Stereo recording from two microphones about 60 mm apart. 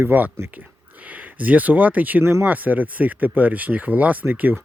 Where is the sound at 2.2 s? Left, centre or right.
Right.